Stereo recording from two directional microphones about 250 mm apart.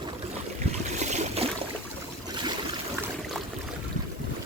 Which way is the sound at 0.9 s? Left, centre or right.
Right.